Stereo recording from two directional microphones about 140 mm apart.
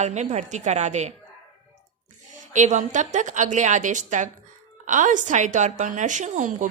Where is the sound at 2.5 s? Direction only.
60° right (ahead or behind).